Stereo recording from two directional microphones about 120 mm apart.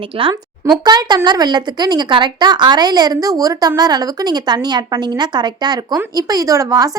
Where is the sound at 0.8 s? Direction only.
35° right (ahead or behind).